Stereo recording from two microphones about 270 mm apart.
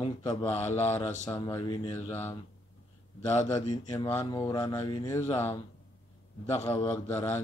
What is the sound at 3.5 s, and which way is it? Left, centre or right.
Speech, centre.